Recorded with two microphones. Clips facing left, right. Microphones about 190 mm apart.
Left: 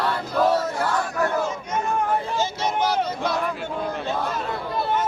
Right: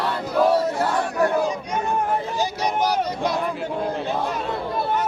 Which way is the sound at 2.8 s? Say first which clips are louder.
Right 1 dB; 15° right (ahead or behind).